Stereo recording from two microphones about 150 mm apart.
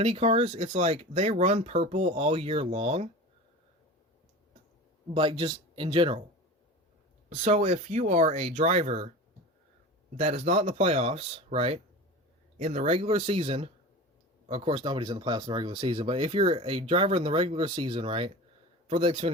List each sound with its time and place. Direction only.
0.0 s speech: 40° right (ahead or behind)
5.1 s speech: 35° right (ahead or behind)
7.3 s speech: 45° right (ahead or behind)
10.2 s speech: 45° right (ahead or behind)